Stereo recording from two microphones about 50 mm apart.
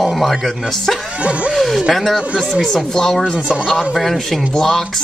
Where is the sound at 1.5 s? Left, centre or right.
Centre.